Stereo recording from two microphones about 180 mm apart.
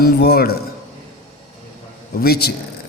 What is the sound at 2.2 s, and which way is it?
Speech, 60° left (ahead or behind).